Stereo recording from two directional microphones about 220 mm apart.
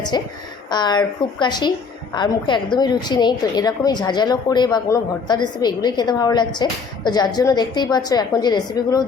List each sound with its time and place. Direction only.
0.1 s a woman's voice: 20° left (ahead or behind)